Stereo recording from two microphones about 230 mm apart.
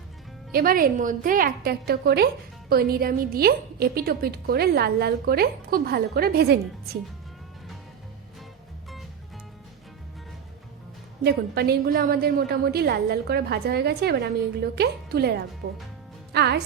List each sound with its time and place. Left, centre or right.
0.5 s a woman's voice: right
11.2 s a woman's voice: right